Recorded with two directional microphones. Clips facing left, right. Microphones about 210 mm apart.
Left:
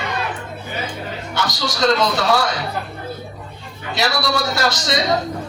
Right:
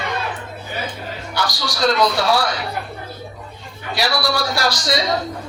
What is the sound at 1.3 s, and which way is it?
Speech, 25° left (ahead or behind).